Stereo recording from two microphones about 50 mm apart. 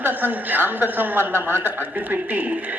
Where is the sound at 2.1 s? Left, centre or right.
Right.